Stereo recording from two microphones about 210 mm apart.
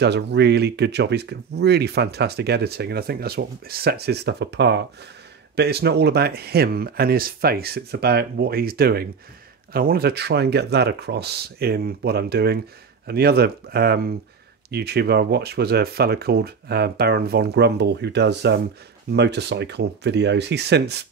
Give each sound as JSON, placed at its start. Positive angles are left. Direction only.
{"t": 0.0, "sound": "speech", "side_deg": -55}